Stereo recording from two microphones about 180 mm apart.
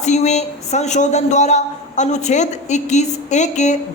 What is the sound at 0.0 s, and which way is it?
A woman's voice, 40° left (ahead or behind).